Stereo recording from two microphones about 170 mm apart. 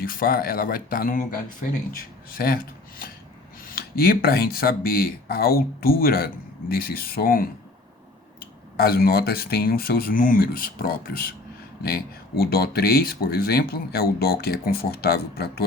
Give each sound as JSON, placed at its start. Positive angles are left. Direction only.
{"t": 0.0, "sound": "speech", "side_deg": 60}